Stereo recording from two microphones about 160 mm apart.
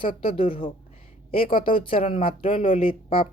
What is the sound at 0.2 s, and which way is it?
A man's voice, 35° left (ahead or behind).